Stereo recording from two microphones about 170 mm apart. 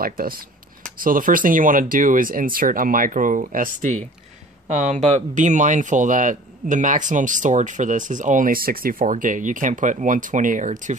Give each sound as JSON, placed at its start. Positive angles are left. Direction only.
{"t": 0.0, "sound": "speech", "side_deg": -60}